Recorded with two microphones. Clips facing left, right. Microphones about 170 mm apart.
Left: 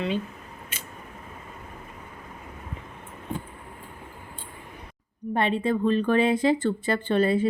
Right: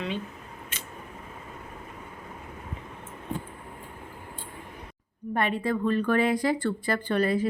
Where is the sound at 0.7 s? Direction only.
10° left (ahead or behind).